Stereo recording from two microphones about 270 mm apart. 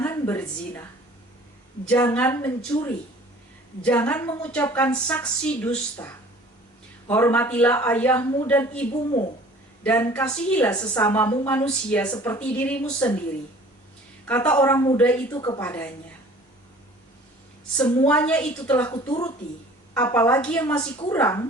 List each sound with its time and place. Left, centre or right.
0.0 s a woman's voice: centre
1.9 s a woman's voice: centre
14.3 s a woman's voice: centre
18.1 s a woman's voice: centre